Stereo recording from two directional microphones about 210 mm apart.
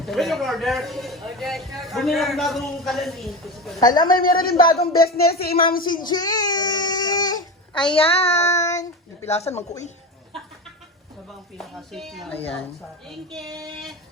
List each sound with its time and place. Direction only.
0.0 s a man's voice: centre (ahead or behind)
3.8 s a child's voice: 20° left (ahead or behind)
4.2 s speech: 45° left (ahead or behind)
6.1 s baby cry: 20° left (ahead or behind)
7.9 s a child's voice: 30° left (ahead or behind)
8.4 s speech: 15° left (ahead or behind)
9.4 s speech: 30° left (ahead or behind)
11.5 s a man's voice: centre (ahead or behind)
13.4 s child singing: 20° right (ahead or behind)